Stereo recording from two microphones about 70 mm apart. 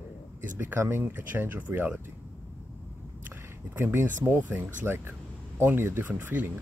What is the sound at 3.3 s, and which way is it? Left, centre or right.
Speech, right.